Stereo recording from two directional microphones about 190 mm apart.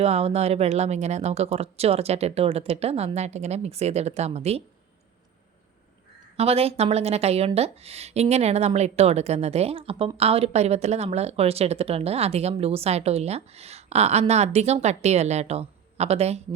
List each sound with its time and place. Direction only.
0.0 s speech: 35° right (ahead or behind)
6.3 s speech: 30° right (ahead or behind)